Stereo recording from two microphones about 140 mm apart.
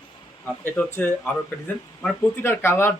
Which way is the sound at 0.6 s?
10° left (ahead or behind).